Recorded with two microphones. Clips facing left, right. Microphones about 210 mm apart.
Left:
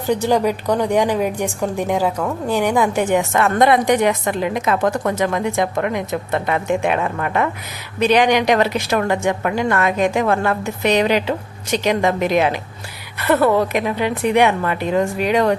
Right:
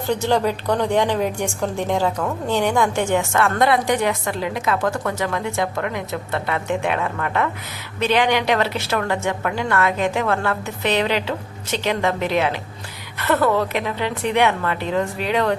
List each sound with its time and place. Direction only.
0.1 s a woman's voice: 15° left (ahead or behind)